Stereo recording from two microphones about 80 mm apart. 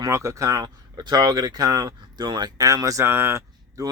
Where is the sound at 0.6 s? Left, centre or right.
Right.